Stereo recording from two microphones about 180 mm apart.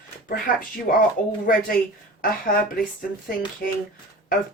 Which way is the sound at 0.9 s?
50° left (ahead or behind).